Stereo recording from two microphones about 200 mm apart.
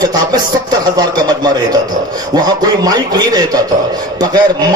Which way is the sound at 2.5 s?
20° right (ahead or behind).